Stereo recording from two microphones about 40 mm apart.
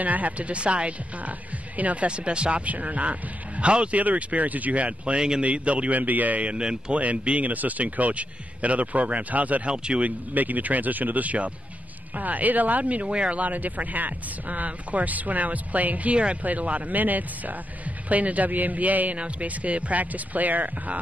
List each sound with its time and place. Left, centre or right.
0.0 s speech: right
2.0 s speech: right
4.0 s speech: right
5.9 s speech: right
6.5 s speech: right
7.0 s speech: right
9.7 s speech: right
10.0 s speech: right
13.4 s speech: right